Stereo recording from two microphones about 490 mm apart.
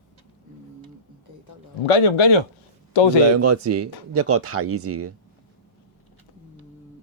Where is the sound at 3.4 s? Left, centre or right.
Right.